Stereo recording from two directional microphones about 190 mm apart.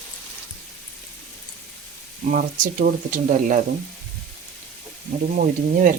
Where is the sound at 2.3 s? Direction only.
45° right (ahead or behind).